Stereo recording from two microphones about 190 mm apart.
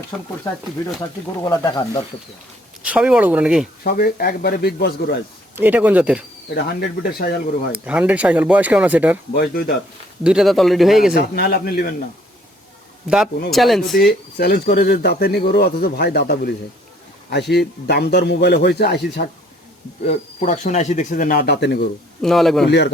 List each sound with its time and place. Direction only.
0.8 s speech: 15° left (ahead or behind)
2.8 s speech: 5° right (ahead or behind)
3.8 s speech: 55° left (ahead or behind)
5.5 s speech: 10° right (ahead or behind)
6.5 s speech: 55° left (ahead or behind)
7.7 s speech: 5° right (ahead or behind)
9.3 s speech: 55° left (ahead or behind)
10.2 s speech: centre (ahead or behind)
11.3 s speech: 55° left (ahead or behind)
13.1 s speech: centre (ahead or behind)
13.9 s speech: 55° left (ahead or behind)
17.5 s speech: 55° left (ahead or behind)
20.1 s speech: 35° left (ahead or behind); by 21.8 s 60° left (ahead or behind)
22.2 s speech: centre (ahead or behind)